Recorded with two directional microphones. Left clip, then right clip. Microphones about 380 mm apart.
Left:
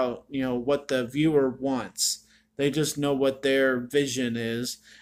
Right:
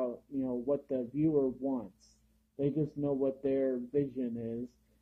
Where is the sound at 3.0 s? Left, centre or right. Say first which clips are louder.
Left 8 dB; left.